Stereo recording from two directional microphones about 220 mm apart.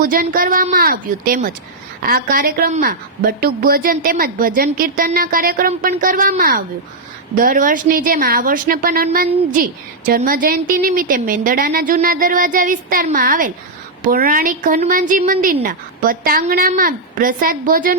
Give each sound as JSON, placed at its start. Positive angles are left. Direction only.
{"t": 0.0, "sound": "a woman's voice", "side_deg": -40}